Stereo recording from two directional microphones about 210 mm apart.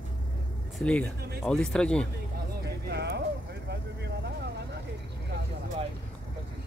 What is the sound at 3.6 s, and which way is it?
Vehicle, 55° right (ahead or behind).